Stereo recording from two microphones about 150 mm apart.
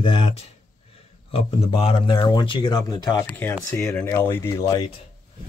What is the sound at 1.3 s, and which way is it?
Speech, 40° left (ahead or behind).